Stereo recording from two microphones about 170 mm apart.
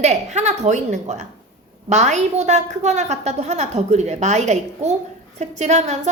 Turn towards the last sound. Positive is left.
turn(degrees=-40)  # may be behind; listen again after turning